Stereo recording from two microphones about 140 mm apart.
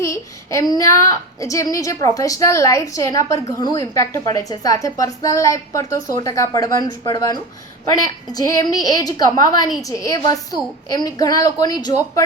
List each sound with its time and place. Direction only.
0.0 s speech: 20° left (ahead or behind)